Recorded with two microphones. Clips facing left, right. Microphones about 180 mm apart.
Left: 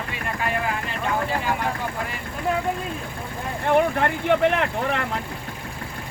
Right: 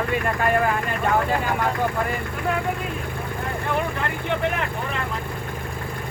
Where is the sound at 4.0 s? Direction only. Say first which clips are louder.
Left 5 dB; 65° left (ahead or behind).